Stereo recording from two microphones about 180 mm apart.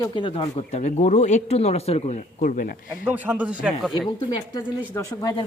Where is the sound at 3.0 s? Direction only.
10° right (ahead or behind).